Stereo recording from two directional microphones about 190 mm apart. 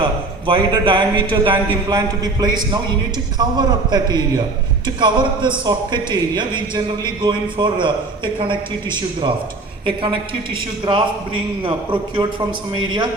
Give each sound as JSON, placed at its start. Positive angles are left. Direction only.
{"t": 0.0, "sound": "speech", "side_deg": -25}